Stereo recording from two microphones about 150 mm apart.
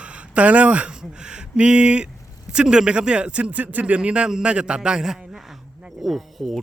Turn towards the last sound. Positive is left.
turn(degrees=0)  # may be behind; listen again after turning